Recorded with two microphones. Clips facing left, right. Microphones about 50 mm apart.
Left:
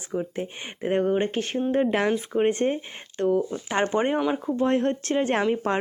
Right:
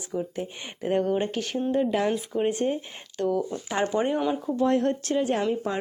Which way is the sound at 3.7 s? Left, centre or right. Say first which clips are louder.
Left 2 dB; left.